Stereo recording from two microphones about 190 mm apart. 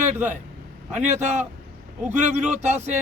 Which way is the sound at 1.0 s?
35° right (ahead or behind).